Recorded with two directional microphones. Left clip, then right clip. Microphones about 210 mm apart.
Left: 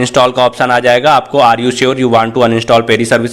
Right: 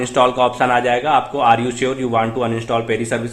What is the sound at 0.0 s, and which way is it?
A man's voice, 40° left (ahead or behind).